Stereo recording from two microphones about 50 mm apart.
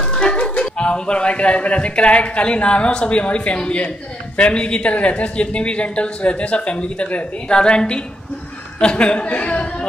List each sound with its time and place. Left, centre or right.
0.1 s speech: centre